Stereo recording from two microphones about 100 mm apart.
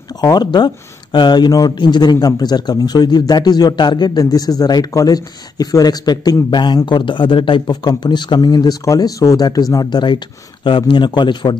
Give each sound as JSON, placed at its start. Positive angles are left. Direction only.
{"t": 0.2, "sound": "a man's voice", "side_deg": 45}
{"t": 7.6, "sound": "speech", "side_deg": 40}
{"t": 8.8, "sound": "speech", "side_deg": 35}